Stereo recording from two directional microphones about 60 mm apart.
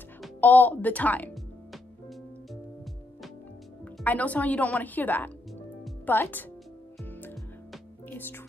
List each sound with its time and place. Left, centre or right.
0.4 s speech: left
4.0 s a woman's voice: left
7.1 s music: left